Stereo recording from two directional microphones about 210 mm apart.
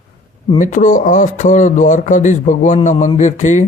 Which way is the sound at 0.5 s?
35° left (ahead or behind).